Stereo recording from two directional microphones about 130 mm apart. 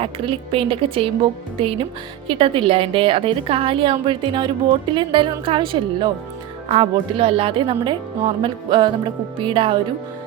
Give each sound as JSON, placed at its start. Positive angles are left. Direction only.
{"t": 0.0, "sound": "speech", "side_deg": -45}